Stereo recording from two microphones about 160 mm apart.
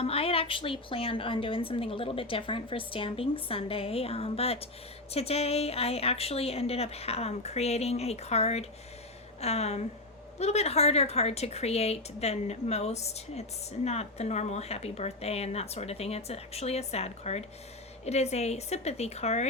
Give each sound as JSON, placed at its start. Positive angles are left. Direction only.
{"t": 0.0, "sound": "a woman's voice", "side_deg": 35}